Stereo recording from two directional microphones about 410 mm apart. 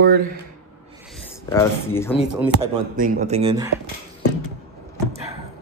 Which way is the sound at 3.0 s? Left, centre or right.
Centre.